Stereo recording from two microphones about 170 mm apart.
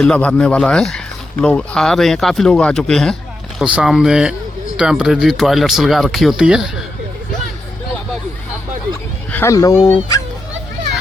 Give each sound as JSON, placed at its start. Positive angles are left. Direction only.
{"t": 0.0, "sound": "speech", "side_deg": 5}
{"t": 9.3, "sound": "speech", "side_deg": 15}